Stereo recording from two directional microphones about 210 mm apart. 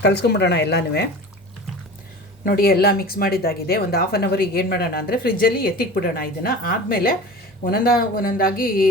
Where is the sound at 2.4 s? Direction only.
45° left (ahead or behind).